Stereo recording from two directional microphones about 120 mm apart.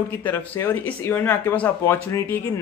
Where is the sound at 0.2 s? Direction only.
15° left (ahead or behind).